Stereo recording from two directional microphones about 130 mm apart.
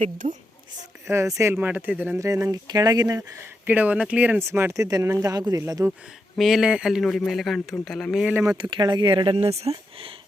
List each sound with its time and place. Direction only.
0.0 s a woman's voice: 75° right (ahead or behind)
1.0 s speech: 20° right (ahead or behind)
2.1 s speech: 25° right (ahead or behind)
3.7 s speech: 10° right (ahead or behind)
6.3 s a man's voice: centre (ahead or behind)
8.7 s speech: 35° right (ahead or behind); by 10.1 s 50° right (ahead or behind)